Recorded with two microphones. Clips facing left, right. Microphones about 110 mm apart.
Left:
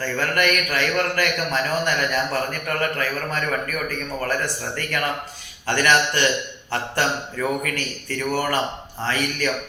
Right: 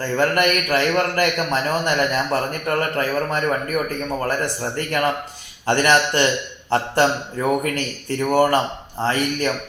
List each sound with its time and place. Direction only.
0.0 s a man's voice: 20° right (ahead or behind)